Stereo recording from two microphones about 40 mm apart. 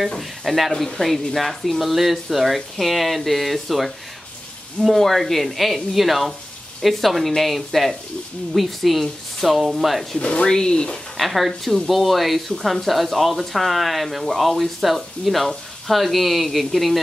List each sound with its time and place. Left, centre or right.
0.2 s speech: centre
10.1 s speech: left
11.1 s speech: centre